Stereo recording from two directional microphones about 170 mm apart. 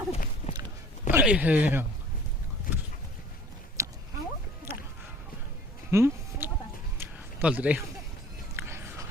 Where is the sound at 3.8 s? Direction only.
15° right (ahead or behind).